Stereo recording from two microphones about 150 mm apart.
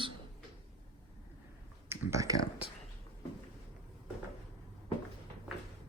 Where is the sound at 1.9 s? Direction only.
20° right (ahead or behind).